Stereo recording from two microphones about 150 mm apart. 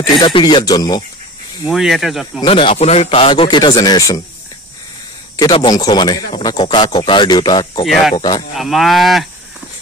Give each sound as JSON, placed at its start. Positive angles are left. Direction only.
{"t": 0.0, "sound": "speech", "side_deg": 30}
{"t": 1.7, "sound": "speech", "side_deg": 0}
{"t": 2.4, "sound": "speech", "side_deg": 40}
{"t": 5.4, "sound": "speech", "side_deg": 30}
{"t": 7.8, "sound": "speech", "side_deg": 0}
{"t": 8.2, "sound": "speech", "side_deg": 30}
{"t": 8.5, "sound": "speech", "side_deg": 0}